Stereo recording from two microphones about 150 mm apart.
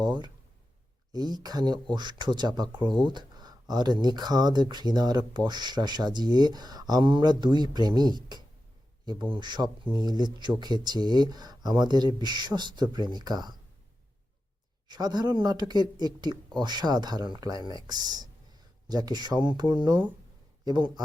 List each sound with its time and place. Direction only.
0.0 s speech: 30° right (ahead or behind)
14.8 s speech: 25° right (ahead or behind)